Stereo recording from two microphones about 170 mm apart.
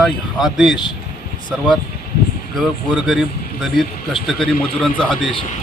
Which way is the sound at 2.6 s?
Centre (ahead or behind).